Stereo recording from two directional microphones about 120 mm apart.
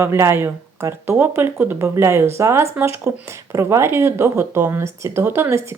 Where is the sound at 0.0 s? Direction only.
20° right (ahead or behind).